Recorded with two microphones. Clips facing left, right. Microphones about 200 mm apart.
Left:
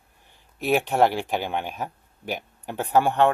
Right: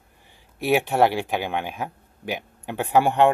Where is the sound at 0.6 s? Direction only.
10° right (ahead or behind).